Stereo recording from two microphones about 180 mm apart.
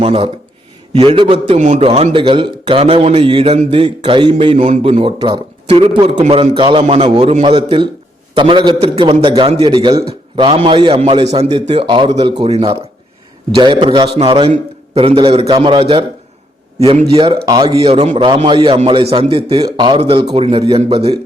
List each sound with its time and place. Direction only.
0.0 s a man's voice: 35° right (ahead or behind)
4.5 s a man's voice: 40° right (ahead or behind)